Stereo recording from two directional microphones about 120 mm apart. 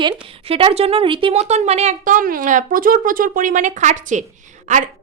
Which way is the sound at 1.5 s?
65° right (ahead or behind).